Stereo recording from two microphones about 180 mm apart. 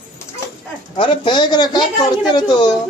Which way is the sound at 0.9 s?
25° left (ahead or behind).